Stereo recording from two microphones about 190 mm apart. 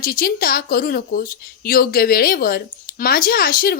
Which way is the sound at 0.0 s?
50° left (ahead or behind).